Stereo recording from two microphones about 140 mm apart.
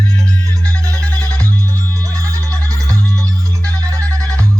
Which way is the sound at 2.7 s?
25° right (ahead or behind).